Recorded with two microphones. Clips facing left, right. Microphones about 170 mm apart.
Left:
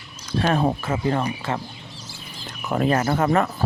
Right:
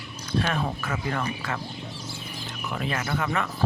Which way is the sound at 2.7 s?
40° left (ahead or behind).